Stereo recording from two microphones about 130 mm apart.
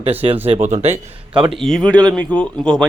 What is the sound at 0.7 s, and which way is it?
Speech, 55° right (ahead or behind).